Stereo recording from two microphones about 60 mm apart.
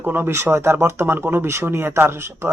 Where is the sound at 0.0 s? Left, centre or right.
Right.